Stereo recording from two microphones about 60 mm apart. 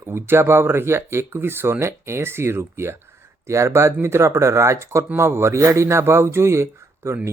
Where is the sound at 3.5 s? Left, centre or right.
Right.